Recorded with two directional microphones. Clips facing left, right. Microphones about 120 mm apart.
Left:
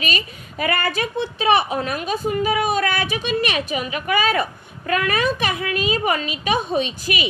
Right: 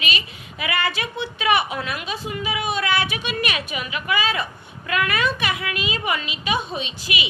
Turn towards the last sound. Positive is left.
turn(degrees=45)  # may be behind; listen again after turning